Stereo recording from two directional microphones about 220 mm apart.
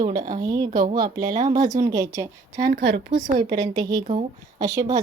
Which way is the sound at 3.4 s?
20° right (ahead or behind).